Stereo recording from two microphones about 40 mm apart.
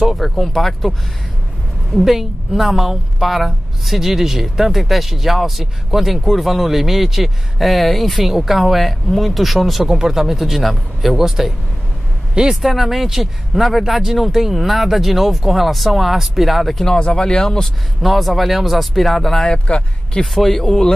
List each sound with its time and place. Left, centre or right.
0.2 s a woman's voice: centre
2.0 s a woman's voice: centre
9.8 s speech: centre
10.4 s a woman's voice: centre
12.6 s a woman's voice: centre
16.7 s a man's voice: centre
18.0 s a woman's voice: centre
19.4 s speech: left
20.3 s a woman's voice: centre